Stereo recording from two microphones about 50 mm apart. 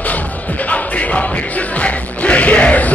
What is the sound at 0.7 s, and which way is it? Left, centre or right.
Music, left.